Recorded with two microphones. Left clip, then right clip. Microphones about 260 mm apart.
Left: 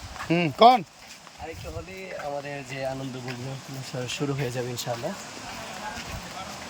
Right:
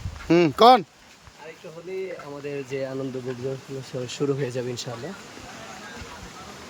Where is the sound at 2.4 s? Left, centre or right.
Centre.